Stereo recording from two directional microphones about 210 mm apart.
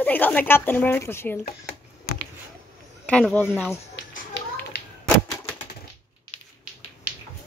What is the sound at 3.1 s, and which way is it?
Speech, 5° left (ahead or behind).